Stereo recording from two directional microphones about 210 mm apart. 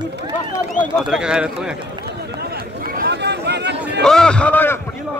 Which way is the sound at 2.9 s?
50° right (ahead or behind).